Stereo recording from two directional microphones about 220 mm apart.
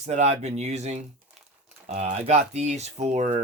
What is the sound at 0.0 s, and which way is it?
Speech, 30° right (ahead or behind).